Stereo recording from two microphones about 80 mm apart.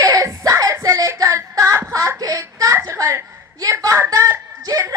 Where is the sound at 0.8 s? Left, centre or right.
Right.